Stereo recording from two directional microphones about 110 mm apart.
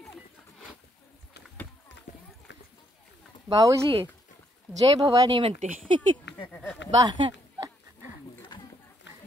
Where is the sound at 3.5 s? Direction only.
30° right (ahead or behind).